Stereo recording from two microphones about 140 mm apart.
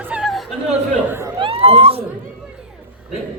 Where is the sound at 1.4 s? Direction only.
40° right (ahead or behind).